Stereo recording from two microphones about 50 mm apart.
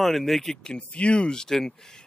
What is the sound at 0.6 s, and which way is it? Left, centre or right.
Speech, left.